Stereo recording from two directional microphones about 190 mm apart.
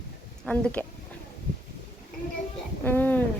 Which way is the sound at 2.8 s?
10° left (ahead or behind).